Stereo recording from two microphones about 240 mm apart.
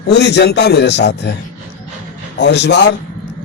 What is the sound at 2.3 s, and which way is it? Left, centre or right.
Speech, left.